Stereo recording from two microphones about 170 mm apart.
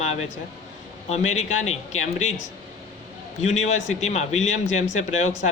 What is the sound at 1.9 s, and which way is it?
Speech, 40° left (ahead or behind).